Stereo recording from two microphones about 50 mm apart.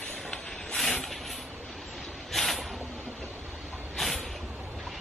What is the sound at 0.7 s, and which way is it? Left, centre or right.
Vehicle, centre.